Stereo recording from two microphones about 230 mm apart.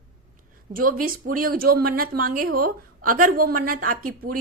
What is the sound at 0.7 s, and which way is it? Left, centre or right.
A woman's voice, right.